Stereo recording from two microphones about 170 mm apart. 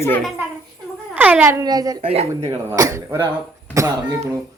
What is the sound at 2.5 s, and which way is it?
Speech, 20° right (ahead or behind).